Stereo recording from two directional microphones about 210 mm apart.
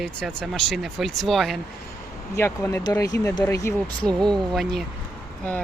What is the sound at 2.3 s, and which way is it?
Speech, 15° left (ahead or behind).